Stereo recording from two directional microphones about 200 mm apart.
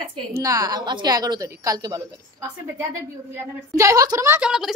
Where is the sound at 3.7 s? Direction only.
15° right (ahead or behind).